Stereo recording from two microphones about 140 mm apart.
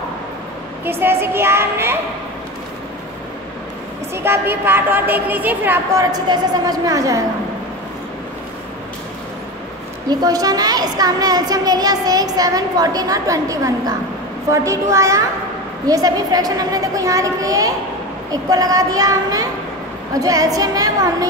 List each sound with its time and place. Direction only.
0.8 s a woman's voice: 15° right (ahead or behind)
4.1 s a woman's voice: 15° right (ahead or behind)
6.1 s a woman's voice: 30° right (ahead or behind)
10.0 s a woman's voice: 25° right (ahead or behind)